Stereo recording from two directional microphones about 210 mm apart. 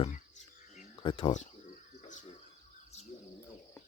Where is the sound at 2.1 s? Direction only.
35° left (ahead or behind).